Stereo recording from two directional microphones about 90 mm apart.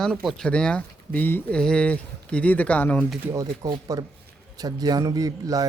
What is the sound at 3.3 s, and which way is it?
A man's voice, 40° right (ahead or behind).